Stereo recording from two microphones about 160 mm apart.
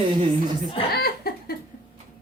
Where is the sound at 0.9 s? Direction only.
75° left (ahead or behind).